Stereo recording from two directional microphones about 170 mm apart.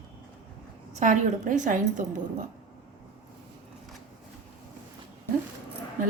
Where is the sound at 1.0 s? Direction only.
45° right (ahead or behind).